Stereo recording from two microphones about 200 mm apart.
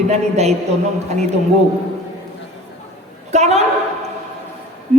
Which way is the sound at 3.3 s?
35° right (ahead or behind).